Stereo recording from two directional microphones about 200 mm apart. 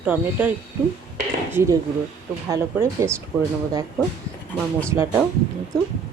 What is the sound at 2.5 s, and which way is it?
Speech, 15° right (ahead or behind).